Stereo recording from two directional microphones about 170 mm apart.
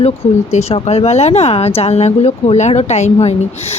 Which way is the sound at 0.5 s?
40° left (ahead or behind).